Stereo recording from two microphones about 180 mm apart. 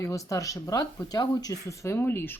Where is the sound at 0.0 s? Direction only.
20° left (ahead or behind).